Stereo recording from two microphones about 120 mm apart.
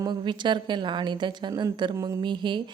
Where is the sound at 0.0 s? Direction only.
40° right (ahead or behind).